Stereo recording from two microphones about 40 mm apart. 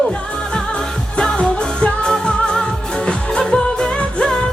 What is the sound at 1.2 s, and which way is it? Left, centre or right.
Music, left.